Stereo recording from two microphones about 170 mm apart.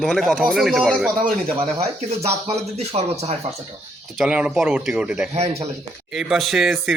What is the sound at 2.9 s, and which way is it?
Speech, 35° right (ahead or behind).